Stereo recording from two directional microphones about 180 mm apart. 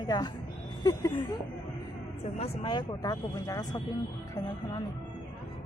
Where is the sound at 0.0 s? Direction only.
20° left (ahead or behind).